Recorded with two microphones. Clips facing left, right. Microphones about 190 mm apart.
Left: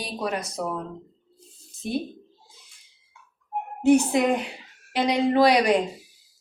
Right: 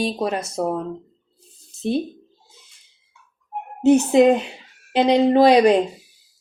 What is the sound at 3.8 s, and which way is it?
Speech, 25° right (ahead or behind).